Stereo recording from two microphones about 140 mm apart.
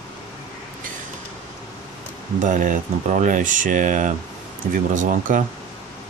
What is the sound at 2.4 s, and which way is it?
Speech, 65° right (ahead or behind).